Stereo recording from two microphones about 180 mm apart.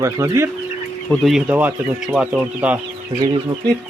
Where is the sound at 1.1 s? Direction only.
Centre (ahead or behind).